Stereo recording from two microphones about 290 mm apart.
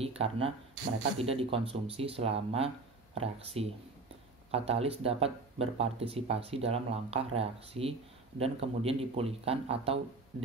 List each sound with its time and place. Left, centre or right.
0.0 s speech: centre